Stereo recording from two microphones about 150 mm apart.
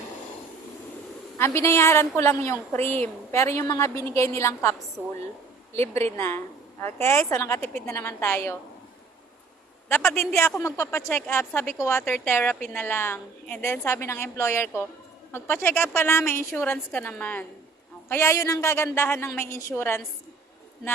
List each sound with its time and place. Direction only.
1.4 s a woman's voice: 15° left (ahead or behind)
6.1 s a woman's voice: 15° left (ahead or behind)
10.2 s a woman's voice: 15° left (ahead or behind)